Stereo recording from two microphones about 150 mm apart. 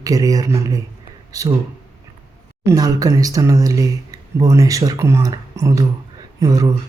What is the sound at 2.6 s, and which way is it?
Speech, 25° right (ahead or behind).